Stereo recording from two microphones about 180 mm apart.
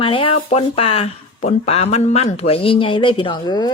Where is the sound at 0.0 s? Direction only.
30° left (ahead or behind).